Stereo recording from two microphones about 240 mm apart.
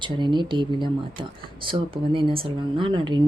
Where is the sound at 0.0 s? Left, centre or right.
Centre.